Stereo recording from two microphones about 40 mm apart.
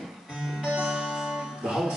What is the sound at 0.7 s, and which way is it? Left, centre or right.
Music, right.